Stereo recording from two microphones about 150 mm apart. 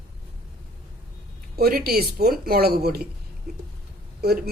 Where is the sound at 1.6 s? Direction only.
80° right.